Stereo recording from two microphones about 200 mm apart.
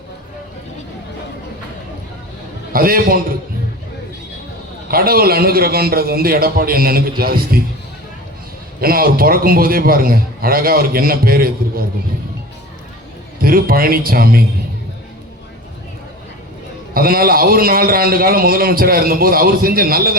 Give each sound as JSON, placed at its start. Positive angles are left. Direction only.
{"t": 2.7, "sound": "a man's voice", "side_deg": -45}
{"t": 4.9, "sound": "a man's voice", "side_deg": -50}
{"t": 8.8, "sound": "a man's voice", "side_deg": -50}
{"t": 13.4, "sound": "a man's voice", "side_deg": -45}
{"t": 16.9, "sound": "a man's voice", "side_deg": -50}